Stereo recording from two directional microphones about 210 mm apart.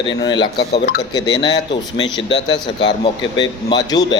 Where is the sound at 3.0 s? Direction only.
20° left (ahead or behind).